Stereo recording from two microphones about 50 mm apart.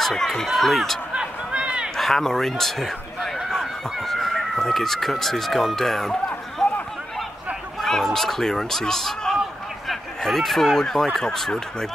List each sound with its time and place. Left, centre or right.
0.0 s speech: centre
1.1 s a sound: right
2.0 s speech: centre
3.2 s a sound: centre
4.0 s speech: centre
7.8 s speech: centre